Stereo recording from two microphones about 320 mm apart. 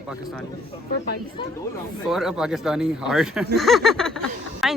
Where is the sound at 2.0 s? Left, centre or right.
Centre.